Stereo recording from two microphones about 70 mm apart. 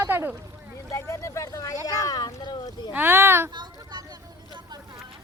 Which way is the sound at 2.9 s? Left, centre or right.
Right.